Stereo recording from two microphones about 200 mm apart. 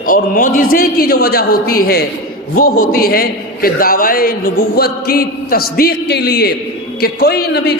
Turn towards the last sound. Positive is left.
turn(degrees=50)  # may be behind; listen again after turning